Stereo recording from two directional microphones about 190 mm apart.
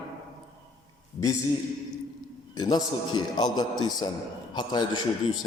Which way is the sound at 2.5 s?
20° left (ahead or behind).